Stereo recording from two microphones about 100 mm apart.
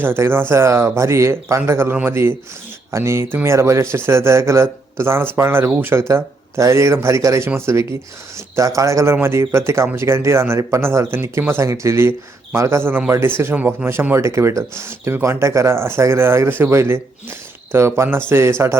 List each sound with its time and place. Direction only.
0.0 s a man's voice: 25° right (ahead or behind)